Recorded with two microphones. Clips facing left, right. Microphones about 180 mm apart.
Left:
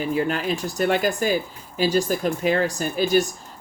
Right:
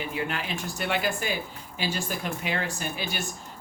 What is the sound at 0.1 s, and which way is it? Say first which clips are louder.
Speech: left 8 dB; 40° left (ahead or behind).